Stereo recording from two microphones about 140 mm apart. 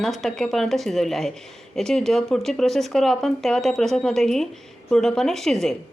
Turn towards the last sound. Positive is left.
turn(degrees=5)  # may be behind; listen again after turning